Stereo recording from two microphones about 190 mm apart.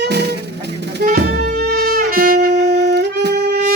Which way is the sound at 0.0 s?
60° right (ahead or behind).